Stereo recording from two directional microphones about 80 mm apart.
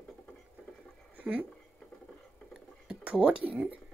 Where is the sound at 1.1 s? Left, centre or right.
Centre.